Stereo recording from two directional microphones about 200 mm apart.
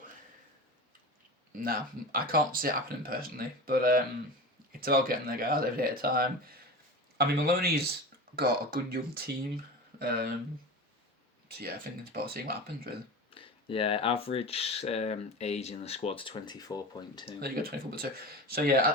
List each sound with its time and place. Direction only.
1.5 s speech: 45° right (ahead or behind)
11.4 s speech: 50° right (ahead or behind)
13.3 s speech: 25° left (ahead or behind)
17.2 s speech: 50° right (ahead or behind)